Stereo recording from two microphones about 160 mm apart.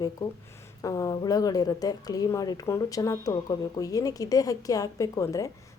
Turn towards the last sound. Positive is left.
turn(degrees=20)  # may be behind; listen again after turning